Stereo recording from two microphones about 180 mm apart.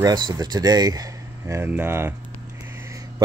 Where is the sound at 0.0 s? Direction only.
25° right (ahead or behind).